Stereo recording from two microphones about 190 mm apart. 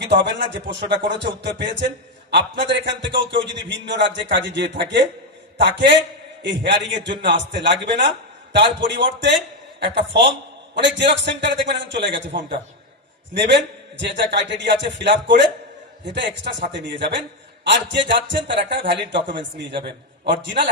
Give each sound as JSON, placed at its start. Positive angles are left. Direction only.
{"t": 0.1, "sound": "a man's voice", "side_deg": -65}
{"t": 13.3, "sound": "a man's voice", "side_deg": -65}